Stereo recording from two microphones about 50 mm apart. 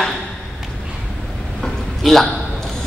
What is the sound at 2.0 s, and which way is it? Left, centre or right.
Speech, centre.